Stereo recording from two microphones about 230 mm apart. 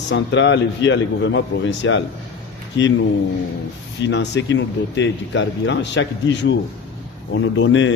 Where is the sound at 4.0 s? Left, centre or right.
Left.